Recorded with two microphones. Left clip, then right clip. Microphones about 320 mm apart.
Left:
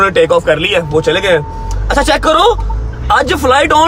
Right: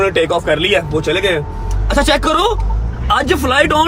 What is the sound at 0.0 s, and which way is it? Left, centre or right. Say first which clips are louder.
Speech: left 5 dB; centre.